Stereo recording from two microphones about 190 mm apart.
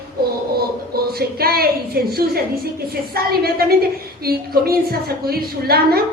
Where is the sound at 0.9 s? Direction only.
55° right (ahead or behind).